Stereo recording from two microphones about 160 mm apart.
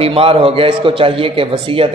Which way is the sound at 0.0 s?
35° right (ahead or behind).